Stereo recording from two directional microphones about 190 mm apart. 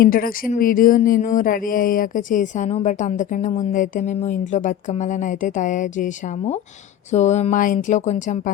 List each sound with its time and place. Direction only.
0.0 s speech: 50° left (ahead or behind)